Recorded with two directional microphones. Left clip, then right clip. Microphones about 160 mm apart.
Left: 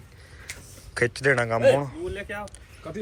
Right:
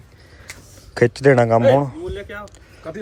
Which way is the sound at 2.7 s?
50° right (ahead or behind).